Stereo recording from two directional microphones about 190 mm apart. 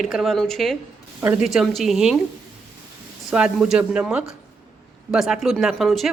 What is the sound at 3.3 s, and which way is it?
Speech, 5° right (ahead or behind).